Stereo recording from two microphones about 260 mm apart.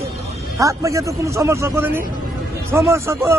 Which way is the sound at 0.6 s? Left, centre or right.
Centre.